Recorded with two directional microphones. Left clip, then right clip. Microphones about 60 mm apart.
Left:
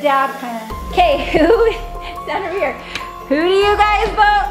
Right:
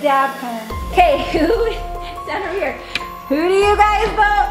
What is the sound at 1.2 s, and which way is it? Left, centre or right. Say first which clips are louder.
Speech: left 4 dB; left.